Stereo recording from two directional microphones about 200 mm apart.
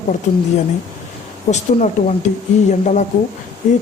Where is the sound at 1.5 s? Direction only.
35° left (ahead or behind).